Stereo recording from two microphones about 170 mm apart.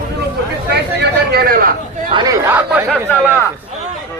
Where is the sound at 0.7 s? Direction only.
70° right (ahead or behind).